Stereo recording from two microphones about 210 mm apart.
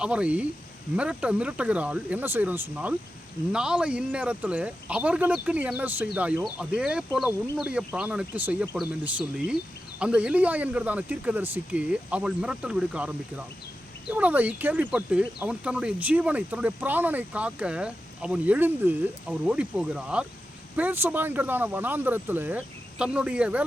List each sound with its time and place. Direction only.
0.0 s speech: 5° right (ahead or behind)